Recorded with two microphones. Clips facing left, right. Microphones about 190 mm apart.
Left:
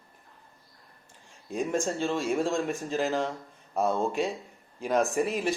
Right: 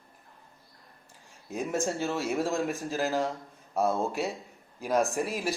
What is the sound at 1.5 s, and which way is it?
Speech, 5° right (ahead or behind).